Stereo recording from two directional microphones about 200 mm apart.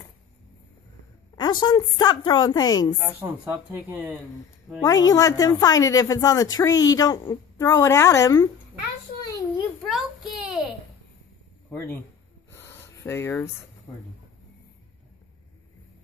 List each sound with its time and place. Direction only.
1.3 s a woman's voice: 20° left (ahead or behind)
3.9 s speech: 10° right (ahead or behind)
4.8 s a woman's voice: 20° left (ahead or behind)
9.8 s a sound: centre (ahead or behind)
11.7 s a woman's voice: 10° left (ahead or behind)
12.4 s a sound: 10° left (ahead or behind)